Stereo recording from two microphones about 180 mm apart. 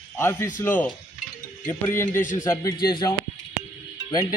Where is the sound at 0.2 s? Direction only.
15° left (ahead or behind).